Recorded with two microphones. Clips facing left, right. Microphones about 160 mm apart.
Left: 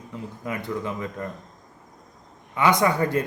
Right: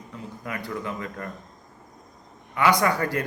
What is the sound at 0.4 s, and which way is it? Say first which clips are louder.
Speech: left 3 dB; 20° left (ahead or behind).